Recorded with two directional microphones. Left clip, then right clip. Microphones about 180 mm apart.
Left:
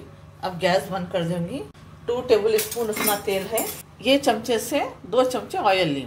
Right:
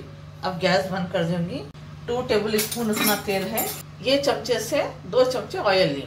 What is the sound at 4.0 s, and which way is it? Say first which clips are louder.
A woman's voice: left 2 dB; 55° left (ahead or behind).